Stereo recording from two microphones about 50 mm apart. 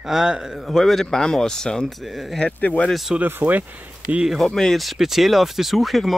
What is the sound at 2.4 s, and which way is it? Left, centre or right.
Speech, left.